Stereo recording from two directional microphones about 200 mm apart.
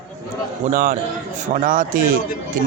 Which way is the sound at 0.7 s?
45° right (ahead or behind).